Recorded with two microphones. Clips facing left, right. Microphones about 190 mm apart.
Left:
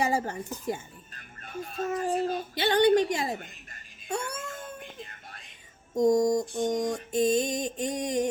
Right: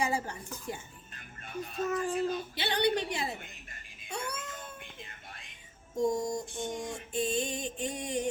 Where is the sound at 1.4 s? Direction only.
45° left (ahead or behind).